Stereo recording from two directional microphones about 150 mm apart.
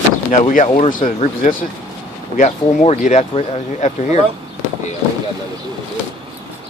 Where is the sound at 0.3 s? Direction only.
55° left (ahead or behind).